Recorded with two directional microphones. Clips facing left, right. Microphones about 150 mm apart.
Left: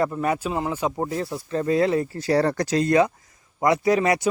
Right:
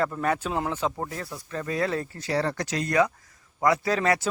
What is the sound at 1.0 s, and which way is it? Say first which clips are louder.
Speech: left 7 dB; 25° left (ahead or behind).